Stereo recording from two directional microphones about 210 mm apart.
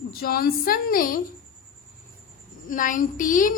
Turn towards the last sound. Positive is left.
turn(degrees=40)  # may be behind; listen again after turning